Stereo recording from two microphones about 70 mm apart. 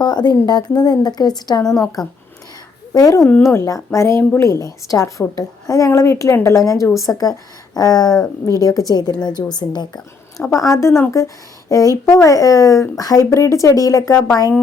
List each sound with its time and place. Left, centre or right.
0.0 s a woman's voice: left
2.9 s speech: left
3.7 s speech: left
7.0 s speech: left
8.4 s a woman's voice: left
10.5 s speech: left
11.7 s speech: left